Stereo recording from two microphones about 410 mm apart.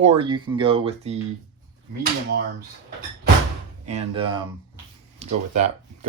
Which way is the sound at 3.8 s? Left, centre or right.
Centre.